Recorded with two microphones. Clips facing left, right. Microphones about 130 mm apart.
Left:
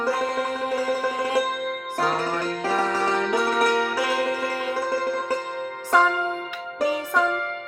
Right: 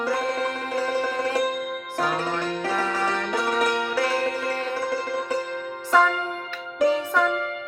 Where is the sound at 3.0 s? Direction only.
5° left (ahead or behind).